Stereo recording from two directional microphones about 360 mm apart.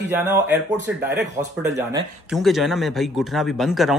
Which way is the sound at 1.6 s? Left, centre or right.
Centre.